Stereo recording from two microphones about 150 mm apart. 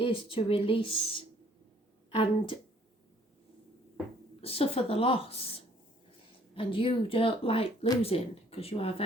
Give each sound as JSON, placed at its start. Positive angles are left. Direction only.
{"t": 0.0, "sound": "speech", "side_deg": 35}
{"t": 4.4, "sound": "speech", "side_deg": 40}